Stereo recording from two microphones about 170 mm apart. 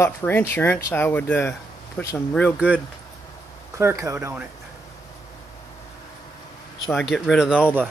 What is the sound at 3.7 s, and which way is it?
Speech, 15° right (ahead or behind).